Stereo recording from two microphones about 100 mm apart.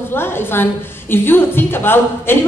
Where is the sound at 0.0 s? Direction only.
20° left (ahead or behind).